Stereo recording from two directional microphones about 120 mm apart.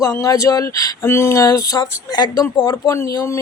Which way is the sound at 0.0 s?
30° left (ahead or behind).